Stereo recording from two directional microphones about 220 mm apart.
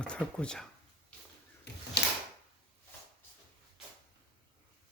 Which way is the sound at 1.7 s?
50° left (ahead or behind).